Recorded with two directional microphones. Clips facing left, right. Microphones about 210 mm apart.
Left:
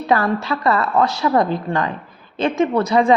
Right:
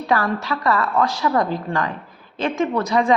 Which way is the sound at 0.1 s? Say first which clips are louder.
Left 3 dB; 25° left (ahead or behind).